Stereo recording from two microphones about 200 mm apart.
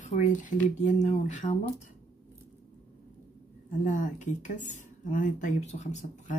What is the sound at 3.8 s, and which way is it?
Speech, 40° left (ahead or behind).